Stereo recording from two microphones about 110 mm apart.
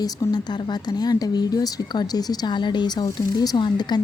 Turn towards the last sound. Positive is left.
turn(degrees=40)  # may be behind; listen again after turning